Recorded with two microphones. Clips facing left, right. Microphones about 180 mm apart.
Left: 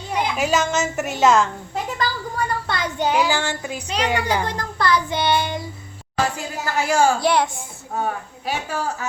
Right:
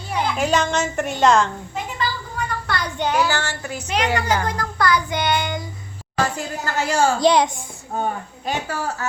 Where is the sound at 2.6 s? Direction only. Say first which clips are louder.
Right 1 dB; 20° left (ahead or behind).